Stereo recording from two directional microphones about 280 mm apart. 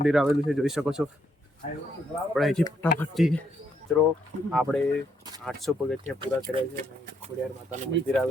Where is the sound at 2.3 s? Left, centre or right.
Centre.